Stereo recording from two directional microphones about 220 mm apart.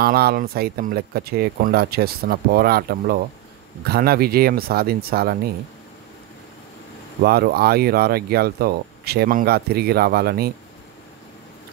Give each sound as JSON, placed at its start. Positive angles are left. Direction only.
{"t": 0.0, "sound": "speech", "side_deg": -45}
{"t": 7.2, "sound": "speech", "side_deg": -45}